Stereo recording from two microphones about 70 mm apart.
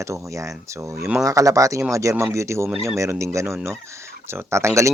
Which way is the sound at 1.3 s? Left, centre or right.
Right.